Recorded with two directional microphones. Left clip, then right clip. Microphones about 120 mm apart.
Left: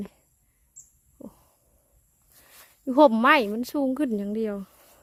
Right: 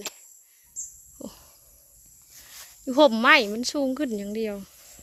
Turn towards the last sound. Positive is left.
turn(degrees=40)  # may be behind; listen again after turning